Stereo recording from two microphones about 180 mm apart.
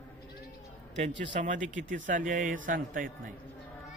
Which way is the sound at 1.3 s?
45° right (ahead or behind).